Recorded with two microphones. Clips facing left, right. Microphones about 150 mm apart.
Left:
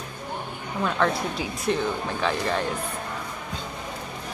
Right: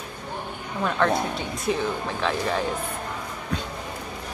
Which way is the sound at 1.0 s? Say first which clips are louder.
Right 3 dB; centre (ahead or behind).